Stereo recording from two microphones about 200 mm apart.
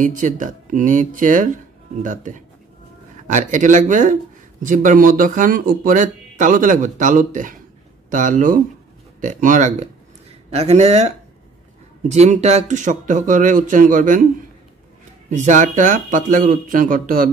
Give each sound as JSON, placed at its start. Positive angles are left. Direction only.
{"t": 0.0, "sound": "a man's voice", "side_deg": -40}
{"t": 12.1, "sound": "a man's voice", "side_deg": -35}
{"t": 15.2, "sound": "a man's voice", "side_deg": -40}